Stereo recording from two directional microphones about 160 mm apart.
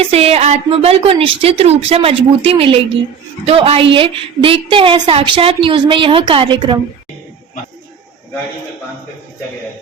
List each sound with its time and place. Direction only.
0.1 s a woman's voice: 40° right (ahead or behind)